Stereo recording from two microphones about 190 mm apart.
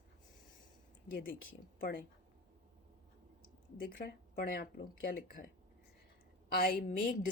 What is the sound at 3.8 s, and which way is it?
Speech, 50° left (ahead or behind).